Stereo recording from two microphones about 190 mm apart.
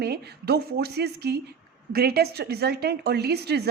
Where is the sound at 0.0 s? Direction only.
55° right (ahead or behind).